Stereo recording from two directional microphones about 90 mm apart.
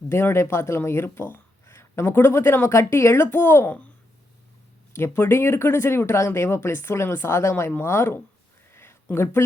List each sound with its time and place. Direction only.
0.1 s speech: 30° left (ahead or behind)
4.9 s speech: 25° left (ahead or behind)
8.7 s a sound: 30° left (ahead or behind)